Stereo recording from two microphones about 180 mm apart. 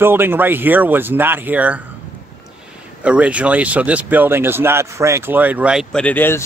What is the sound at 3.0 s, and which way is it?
Speech, 5° right (ahead or behind).